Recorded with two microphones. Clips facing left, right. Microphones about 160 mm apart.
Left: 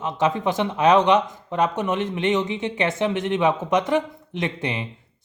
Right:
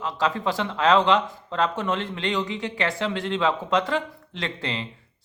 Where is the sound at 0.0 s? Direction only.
20° left (ahead or behind).